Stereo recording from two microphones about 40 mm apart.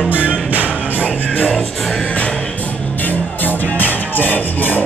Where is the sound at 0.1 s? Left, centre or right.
Right.